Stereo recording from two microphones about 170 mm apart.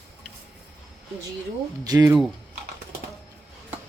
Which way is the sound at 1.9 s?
25° right (ahead or behind).